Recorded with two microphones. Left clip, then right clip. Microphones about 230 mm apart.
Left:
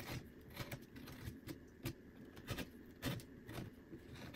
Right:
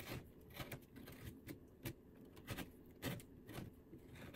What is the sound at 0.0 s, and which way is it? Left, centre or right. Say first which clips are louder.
Vehicle: left 2 dB; centre.